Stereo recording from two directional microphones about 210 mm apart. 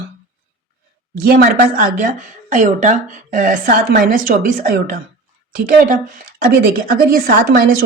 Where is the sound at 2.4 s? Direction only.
35° right (ahead or behind).